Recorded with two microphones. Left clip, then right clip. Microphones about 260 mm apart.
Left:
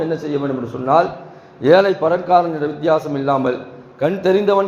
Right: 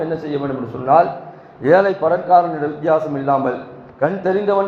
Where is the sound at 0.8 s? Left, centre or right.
Left.